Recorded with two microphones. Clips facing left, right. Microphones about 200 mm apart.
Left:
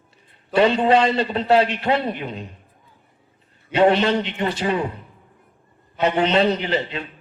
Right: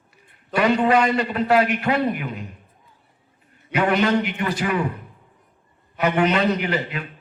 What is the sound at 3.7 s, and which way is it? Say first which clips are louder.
A man's voice: left 3 dB; 30° left (ahead or behind).